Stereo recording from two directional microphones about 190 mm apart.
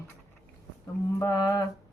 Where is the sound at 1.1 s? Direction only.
20° left (ahead or behind).